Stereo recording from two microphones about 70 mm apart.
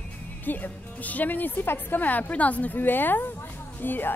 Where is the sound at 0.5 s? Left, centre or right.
Left.